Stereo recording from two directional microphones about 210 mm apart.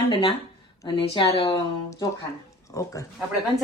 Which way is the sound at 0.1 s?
25° left (ahead or behind).